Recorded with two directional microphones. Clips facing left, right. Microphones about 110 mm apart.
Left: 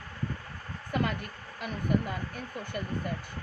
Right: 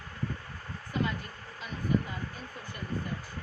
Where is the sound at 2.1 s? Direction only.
60° left (ahead or behind).